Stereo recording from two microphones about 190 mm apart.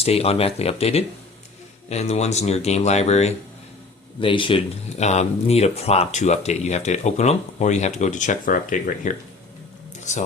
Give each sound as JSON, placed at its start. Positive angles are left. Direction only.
{"t": 0.0, "sound": "speech", "side_deg": 30}